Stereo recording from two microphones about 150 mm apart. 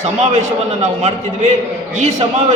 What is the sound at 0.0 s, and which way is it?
A man's voice, 50° right (ahead or behind).